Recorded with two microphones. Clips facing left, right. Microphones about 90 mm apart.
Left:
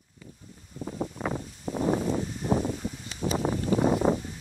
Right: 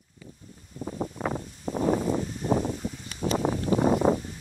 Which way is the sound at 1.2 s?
40° right (ahead or behind).